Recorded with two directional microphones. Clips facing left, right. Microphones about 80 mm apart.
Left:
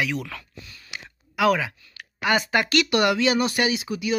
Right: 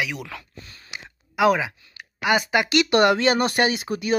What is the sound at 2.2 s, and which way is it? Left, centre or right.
Speech, centre.